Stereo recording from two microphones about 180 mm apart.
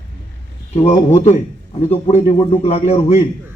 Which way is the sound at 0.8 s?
40° left (ahead or behind).